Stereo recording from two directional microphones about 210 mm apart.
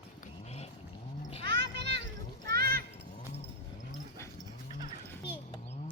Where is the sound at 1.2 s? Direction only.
30° left (ahead or behind).